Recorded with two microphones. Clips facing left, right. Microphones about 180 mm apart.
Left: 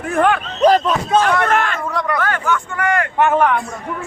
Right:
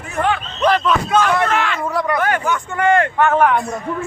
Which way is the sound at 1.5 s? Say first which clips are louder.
Left 2 dB; 50° left (ahead or behind).